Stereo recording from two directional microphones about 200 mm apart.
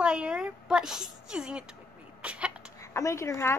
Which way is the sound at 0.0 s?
5° right (ahead or behind).